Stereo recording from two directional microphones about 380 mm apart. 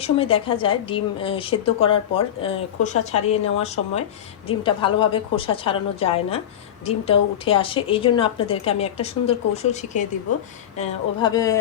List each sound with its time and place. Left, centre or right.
0.0 s a woman's voice: centre